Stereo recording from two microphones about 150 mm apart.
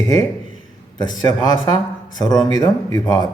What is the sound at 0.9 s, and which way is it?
Speech, 25° left (ahead or behind).